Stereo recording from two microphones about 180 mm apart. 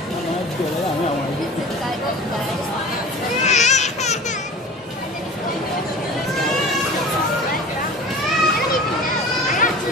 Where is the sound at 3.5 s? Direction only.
40° left (ahead or behind).